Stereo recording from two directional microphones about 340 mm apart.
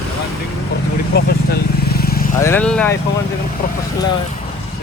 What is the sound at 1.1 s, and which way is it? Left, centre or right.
Vehicle, left.